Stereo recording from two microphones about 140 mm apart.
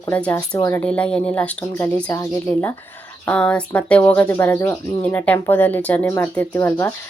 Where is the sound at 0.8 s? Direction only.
10° left (ahead or behind).